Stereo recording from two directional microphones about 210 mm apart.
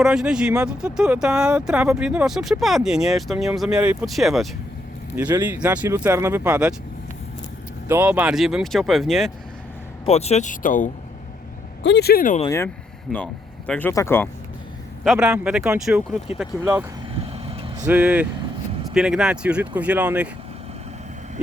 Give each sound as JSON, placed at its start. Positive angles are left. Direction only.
{"t": 0.0, "sound": "speech", "side_deg": -5}
{"t": 7.9, "sound": "speech", "side_deg": -10}
{"t": 10.1, "sound": "speech", "side_deg": 30}
{"t": 11.8, "sound": "speech", "side_deg": 55}
{"t": 12.5, "sound": "speech", "side_deg": 10}
{"t": 15.0, "sound": "speech", "side_deg": -5}
{"t": 17.2, "sound": "vehicle", "side_deg": -30}
{"t": 17.8, "sound": "speech", "side_deg": -5}